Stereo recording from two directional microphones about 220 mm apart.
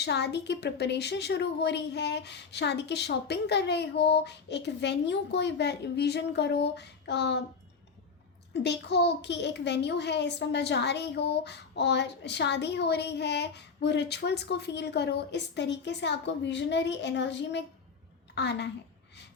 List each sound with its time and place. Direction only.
0.0 s a child's voice: 50° left (ahead or behind)
8.6 s a child's voice: 50° left (ahead or behind)